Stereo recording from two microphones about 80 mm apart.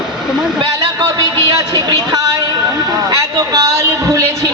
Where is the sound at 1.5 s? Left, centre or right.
Right.